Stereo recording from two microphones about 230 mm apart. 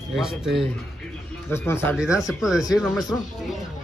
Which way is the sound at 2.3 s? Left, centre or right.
Centre.